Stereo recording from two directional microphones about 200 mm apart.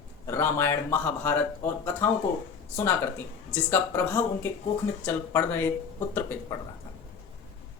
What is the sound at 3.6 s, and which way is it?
Speech, 10° left (ahead or behind).